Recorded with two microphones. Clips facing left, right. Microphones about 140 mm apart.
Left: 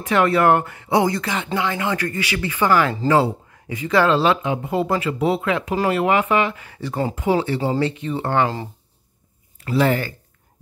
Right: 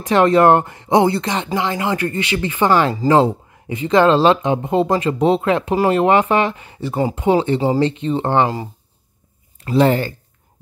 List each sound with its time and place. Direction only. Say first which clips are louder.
0.0 s speech: right 4 dB; 30° right (ahead or behind)
1.5 s speech: right 2 dB; 20° right (ahead or behind)
6.6 s speech: right 4 dB; 20° right (ahead or behind)
9.6 s speech: right 4 dB; 30° right (ahead or behind)